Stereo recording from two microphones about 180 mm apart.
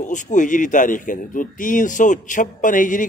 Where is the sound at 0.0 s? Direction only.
45° left (ahead or behind).